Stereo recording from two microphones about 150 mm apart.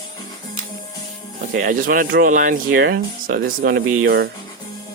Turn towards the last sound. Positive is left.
turn(degrees=-90)